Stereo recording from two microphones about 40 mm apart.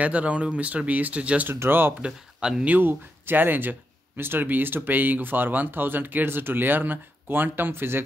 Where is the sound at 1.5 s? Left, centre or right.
Right.